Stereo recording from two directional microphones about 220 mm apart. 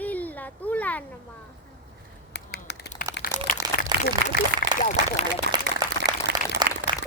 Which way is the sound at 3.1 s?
40° left (ahead or behind).